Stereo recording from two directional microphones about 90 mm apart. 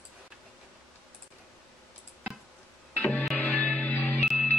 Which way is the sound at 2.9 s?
15° left (ahead or behind).